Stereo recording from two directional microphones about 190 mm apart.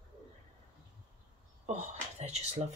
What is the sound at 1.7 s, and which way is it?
Speech, 35° right (ahead or behind).